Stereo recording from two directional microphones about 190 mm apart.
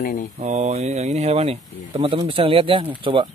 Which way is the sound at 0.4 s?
40° right (ahead or behind).